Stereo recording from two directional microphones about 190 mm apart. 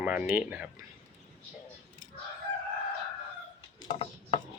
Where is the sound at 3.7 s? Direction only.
25° left (ahead or behind).